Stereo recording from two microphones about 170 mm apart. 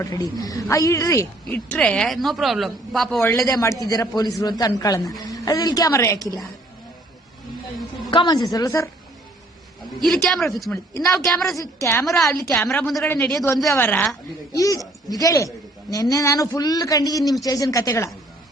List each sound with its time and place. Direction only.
0.0 s speech: 20° left (ahead or behind); by 3.2 s centre (ahead or behind)
3.2 s speech: 20° left (ahead or behind)
8.1 s speech: 25° left (ahead or behind)
10.2 s speech: centre (ahead or behind)
11.6 s speech: 15° left (ahead or behind)
12.0 s speech: centre (ahead or behind)
12.4 s speech: 20° left (ahead or behind)
12.6 s speech: 5° left (ahead or behind)